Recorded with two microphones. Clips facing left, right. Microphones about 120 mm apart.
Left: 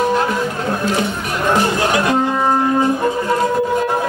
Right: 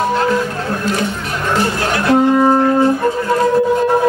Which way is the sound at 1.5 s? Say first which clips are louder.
Left 1 dB; 15° left (ahead or behind).